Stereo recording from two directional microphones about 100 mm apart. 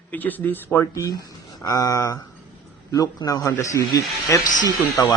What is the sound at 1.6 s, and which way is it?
Speech, 35° left (ahead or behind).